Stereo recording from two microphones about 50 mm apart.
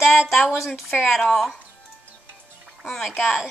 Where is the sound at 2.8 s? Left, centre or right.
Centre.